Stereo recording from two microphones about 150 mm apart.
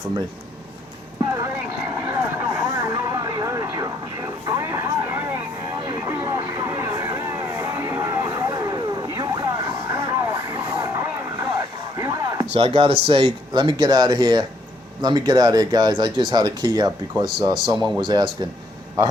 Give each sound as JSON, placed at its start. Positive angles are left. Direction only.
{"t": 1.2, "sound": "clip-clop", "side_deg": -25}
{"t": 2.0, "sound": "vehicle", "side_deg": -15}
{"t": 11.9, "sound": "a sound", "side_deg": -20}
{"t": 12.5, "sound": "speech", "side_deg": -40}